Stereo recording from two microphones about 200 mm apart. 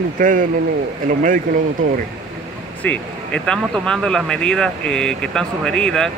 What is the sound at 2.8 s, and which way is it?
Speech, 5° left (ahead or behind).